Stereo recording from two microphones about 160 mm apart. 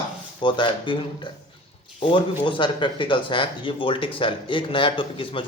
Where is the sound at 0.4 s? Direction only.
30° left (ahead or behind).